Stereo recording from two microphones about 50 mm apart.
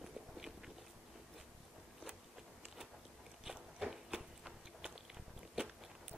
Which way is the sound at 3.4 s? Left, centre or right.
Centre.